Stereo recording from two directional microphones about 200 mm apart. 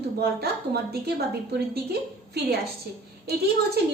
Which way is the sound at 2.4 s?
50° right (ahead or behind).